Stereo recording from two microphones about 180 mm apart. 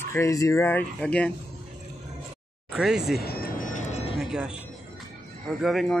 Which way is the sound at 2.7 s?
5° right (ahead or behind).